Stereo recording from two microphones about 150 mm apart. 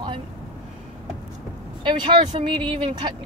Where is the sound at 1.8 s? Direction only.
30° right (ahead or behind).